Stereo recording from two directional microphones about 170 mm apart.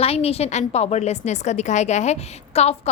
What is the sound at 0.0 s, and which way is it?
A woman's voice, 35° left (ahead or behind).